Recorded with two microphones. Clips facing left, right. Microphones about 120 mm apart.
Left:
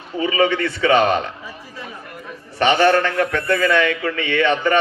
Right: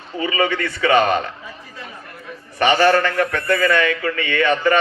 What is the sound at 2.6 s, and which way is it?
Speech, 20° left (ahead or behind).